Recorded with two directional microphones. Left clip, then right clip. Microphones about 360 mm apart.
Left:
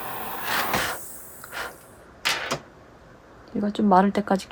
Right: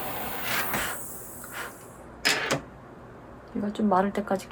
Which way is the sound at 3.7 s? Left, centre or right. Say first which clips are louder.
Left 5 dB; left.